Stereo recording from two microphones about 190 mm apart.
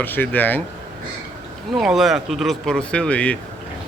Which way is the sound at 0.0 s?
10° left (ahead or behind).